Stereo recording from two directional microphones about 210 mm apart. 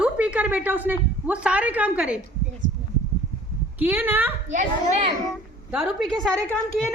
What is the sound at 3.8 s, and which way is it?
Speech, 10° right (ahead or behind).